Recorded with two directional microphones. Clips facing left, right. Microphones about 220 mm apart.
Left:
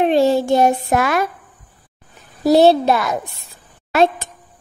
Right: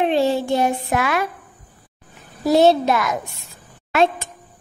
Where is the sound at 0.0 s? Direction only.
45° left (ahead or behind).